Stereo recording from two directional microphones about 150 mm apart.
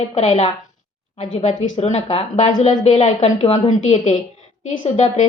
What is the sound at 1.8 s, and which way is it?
A woman's voice, 45° left (ahead or behind).